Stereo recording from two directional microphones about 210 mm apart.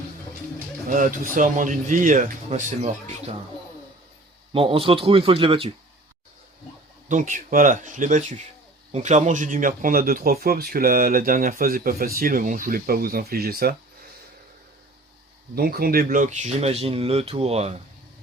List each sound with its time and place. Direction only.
0.9 s speech: 40° right (ahead or behind)
4.5 s speech: 25° right (ahead or behind)
7.1 s speech: 35° right (ahead or behind)
15.5 s speech: 45° right (ahead or behind); by 17.7 s 30° right (ahead or behind)